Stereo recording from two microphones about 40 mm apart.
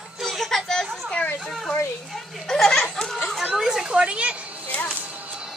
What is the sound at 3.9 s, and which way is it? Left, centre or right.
Speech, right.